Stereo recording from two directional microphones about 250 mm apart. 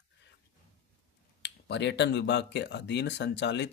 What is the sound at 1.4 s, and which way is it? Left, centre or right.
Speech, left.